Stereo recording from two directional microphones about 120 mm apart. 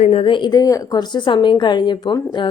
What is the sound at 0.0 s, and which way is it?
A woman's voice, 55° left (ahead or behind).